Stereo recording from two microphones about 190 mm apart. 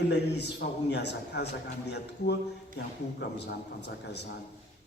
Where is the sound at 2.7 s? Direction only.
60° left (ahead or behind).